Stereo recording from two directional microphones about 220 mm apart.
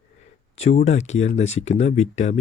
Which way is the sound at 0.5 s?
30° left (ahead or behind).